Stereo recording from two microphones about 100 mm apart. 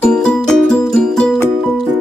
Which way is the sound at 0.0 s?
10° left (ahead or behind).